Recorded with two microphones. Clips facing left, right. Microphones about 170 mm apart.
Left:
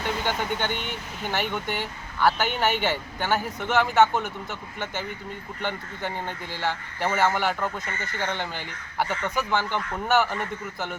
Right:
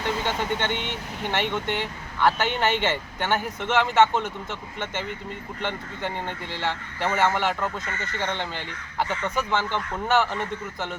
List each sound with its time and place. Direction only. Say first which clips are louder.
0.3 s speech: right 1 dB; 5° left (ahead or behind)
6.0 s speech: right 2 dB; 20° right (ahead or behind)
6.6 s speech: left 1 dB; 10° left (ahead or behind)